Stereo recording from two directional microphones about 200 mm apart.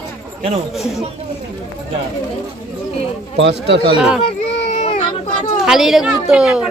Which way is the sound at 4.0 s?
5° right (ahead or behind).